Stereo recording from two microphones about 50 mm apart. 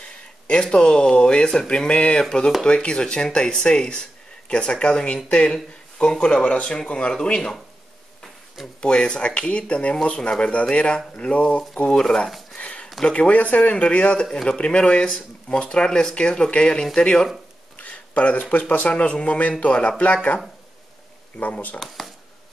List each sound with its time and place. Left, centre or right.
0.0 s speech: centre
8.8 s speech: centre
12.5 s a sound: left
13.0 s speech: left
14.3 s speech: centre
14.6 s speech: left
21.4 s speech: left
21.7 s speech: centre